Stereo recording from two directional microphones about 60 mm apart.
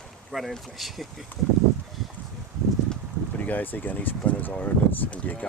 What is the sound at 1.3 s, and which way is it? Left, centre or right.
Speech, left.